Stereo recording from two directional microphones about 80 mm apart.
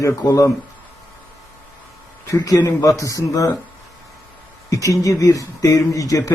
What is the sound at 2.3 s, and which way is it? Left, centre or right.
Speech, left.